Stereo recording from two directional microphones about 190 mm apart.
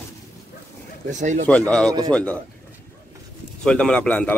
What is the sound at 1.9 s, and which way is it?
Speech, 20° right (ahead or behind).